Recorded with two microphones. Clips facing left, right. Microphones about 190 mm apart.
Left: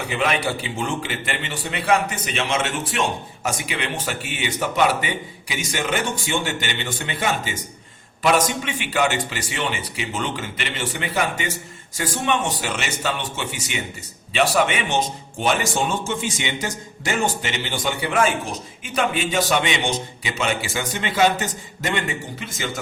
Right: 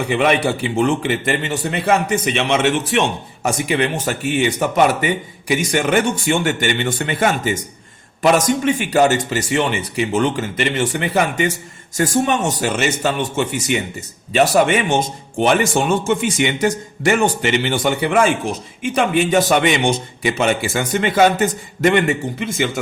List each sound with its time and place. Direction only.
0.1 s a man's voice: 60° right (ahead or behind)
3.7 s speech: 45° right (ahead or behind)
11.9 s speech: 45° right (ahead or behind)
15.4 s a man's voice: 60° right (ahead or behind)